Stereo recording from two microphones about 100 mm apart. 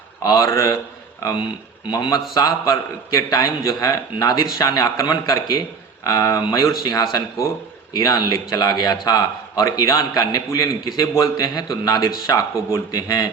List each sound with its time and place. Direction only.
0.2 s a man's voice: 30° left (ahead or behind)
1.9 s a man's voice: 35° left (ahead or behind)